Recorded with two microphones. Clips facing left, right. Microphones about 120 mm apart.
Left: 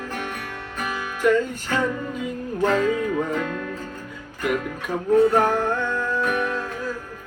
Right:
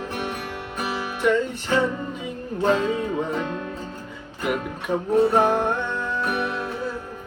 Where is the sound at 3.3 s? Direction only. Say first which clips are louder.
Left 1 dB; 25° right (ahead or behind).